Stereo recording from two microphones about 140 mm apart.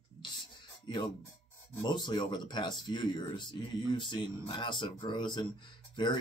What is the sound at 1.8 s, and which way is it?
Speech, 30° left (ahead or behind).